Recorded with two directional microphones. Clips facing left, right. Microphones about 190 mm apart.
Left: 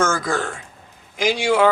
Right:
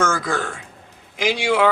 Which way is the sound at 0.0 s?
45° left (ahead or behind).